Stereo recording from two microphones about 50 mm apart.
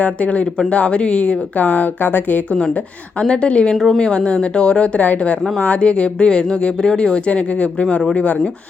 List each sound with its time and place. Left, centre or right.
0.0 s speech: left
3.2 s speech: centre
3.8 s speech: centre; by 8.4 s left